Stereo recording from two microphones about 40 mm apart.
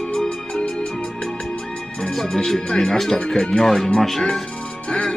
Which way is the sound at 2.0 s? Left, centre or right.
Centre.